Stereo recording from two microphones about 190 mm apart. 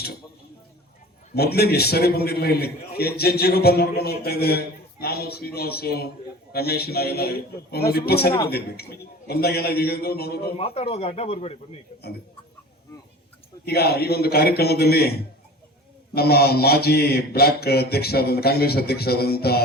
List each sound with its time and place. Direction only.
1.4 s a man's voice: 55° left (ahead or behind)
10.6 s speech: 30° left (ahead or behind)
13.7 s a man's voice: 55° left (ahead or behind)